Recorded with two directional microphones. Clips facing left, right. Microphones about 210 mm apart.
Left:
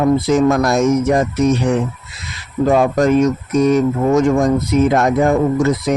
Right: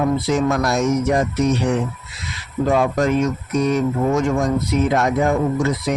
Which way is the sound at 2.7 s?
45° left (ahead or behind).